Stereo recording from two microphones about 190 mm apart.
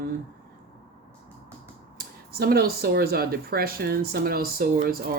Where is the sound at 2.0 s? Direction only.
55° right (ahead or behind).